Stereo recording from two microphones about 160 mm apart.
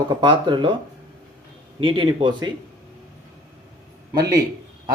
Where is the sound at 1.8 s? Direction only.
35° right (ahead or behind).